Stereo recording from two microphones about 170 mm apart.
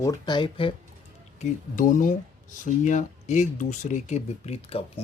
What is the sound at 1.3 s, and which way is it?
Speech, 50° left (ahead or behind).